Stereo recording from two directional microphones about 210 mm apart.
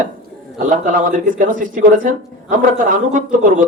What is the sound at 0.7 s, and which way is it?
Speech, 40° right (ahead or behind).